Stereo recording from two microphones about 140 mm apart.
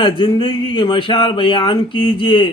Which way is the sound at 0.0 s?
35° left (ahead or behind).